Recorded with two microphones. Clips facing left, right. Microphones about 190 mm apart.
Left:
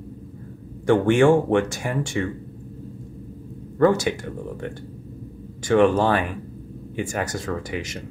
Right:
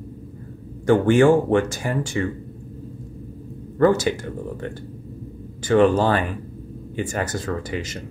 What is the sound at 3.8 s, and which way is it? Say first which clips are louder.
Speech: right 1 dB; centre (ahead or behind).